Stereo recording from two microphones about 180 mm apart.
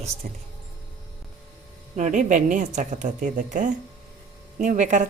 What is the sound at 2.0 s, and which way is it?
Speech, 45° right (ahead or behind).